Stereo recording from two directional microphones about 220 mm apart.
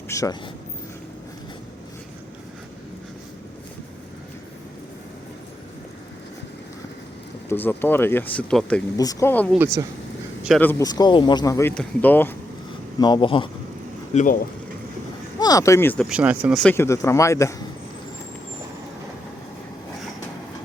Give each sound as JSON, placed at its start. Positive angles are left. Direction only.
{"t": 0.1, "sound": "speech", "side_deg": 15}
{"t": 7.4, "sound": "speech", "side_deg": 10}
{"t": 9.0, "sound": "speech", "side_deg": 15}
{"t": 10.6, "sound": "speech", "side_deg": 10}
{"t": 13.0, "sound": "speech", "side_deg": 20}
{"t": 14.1, "sound": "speech", "side_deg": 35}
{"t": 15.4, "sound": "speech", "side_deg": 15}
{"t": 16.0, "sound": "speech", "side_deg": -5}
{"t": 16.6, "sound": "speech", "side_deg": 10}